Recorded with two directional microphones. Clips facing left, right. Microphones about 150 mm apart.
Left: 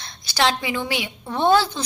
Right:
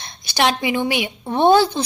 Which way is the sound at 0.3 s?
15° right (ahead or behind).